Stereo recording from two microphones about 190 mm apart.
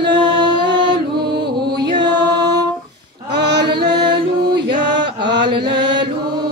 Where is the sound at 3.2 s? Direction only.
60° right (ahead or behind).